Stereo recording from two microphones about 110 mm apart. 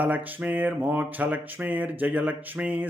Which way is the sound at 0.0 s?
15° right (ahead or behind).